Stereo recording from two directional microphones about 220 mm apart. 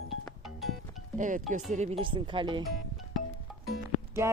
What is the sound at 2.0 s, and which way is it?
Speech, 20° right (ahead or behind).